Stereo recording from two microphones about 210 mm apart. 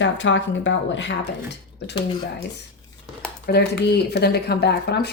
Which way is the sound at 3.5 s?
50° left (ahead or behind).